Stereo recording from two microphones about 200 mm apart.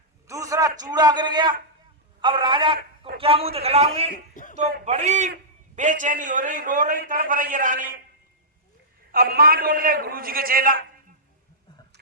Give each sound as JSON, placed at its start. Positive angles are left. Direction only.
{"t": 0.3, "sound": "a man's voice", "side_deg": -15}
{"t": 4.1, "sound": "a sound", "side_deg": 40}
{"t": 4.9, "sound": "a man's voice", "side_deg": -35}
{"t": 9.1, "sound": "a man's voice", "side_deg": -50}